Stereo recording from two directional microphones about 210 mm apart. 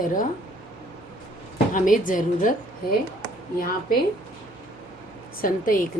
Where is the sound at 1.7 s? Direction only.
40° left (ahead or behind).